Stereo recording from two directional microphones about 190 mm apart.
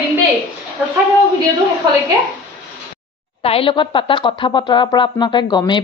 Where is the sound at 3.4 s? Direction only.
30° left (ahead or behind).